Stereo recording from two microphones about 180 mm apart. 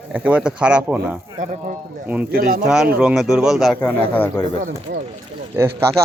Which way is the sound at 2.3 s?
55° right (ahead or behind).